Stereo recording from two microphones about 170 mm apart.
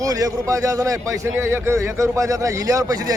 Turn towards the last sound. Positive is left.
turn(degrees=-20)  # may be behind; listen again after turning